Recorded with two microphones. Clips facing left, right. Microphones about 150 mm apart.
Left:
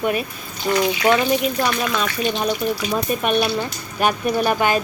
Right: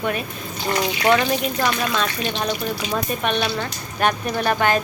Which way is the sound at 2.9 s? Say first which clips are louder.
Left 2 dB; 10° left (ahead or behind).